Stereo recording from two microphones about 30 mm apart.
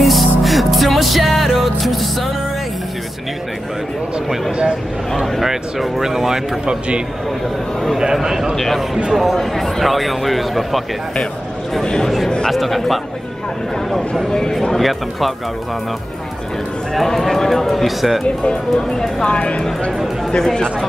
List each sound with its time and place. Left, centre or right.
0.0 s music: centre
4.5 s a sound: right
5.1 s a sound: centre
5.4 s speech: centre
6.6 s a man's voice: right
8.0 s speech: centre
8.5 s speech: centre
9.1 s speech: centre
11.8 s speech: left
12.4 s speech: centre
14.7 s speech: centre
17.0 s speech: centre
18.2 s speech: left
19.2 s speech: left